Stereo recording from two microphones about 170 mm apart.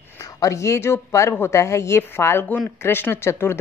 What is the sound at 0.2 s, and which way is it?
Speech, 20° left (ahead or behind).